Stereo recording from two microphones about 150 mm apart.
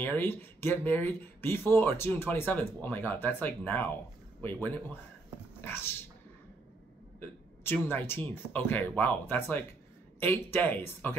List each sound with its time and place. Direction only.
0.0 s speech: 15° left (ahead or behind)
7.2 s speech: 15° left (ahead or behind)